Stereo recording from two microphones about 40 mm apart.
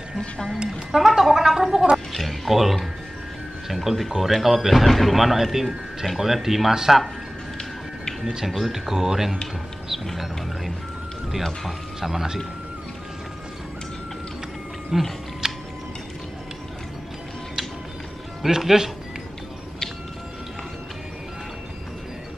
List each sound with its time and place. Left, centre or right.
0.7 s speech: centre
2.1 s speech: centre
8.2 s speech: centre
8.5 s speech: centre
11.6 s speech: centre
14.9 s speech: centre
15.4 s music: centre
18.6 s speech: centre